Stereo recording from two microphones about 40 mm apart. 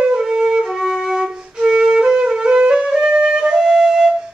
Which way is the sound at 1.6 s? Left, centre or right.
Centre.